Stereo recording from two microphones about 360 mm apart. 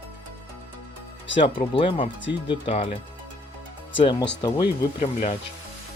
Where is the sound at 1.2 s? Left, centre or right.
Left.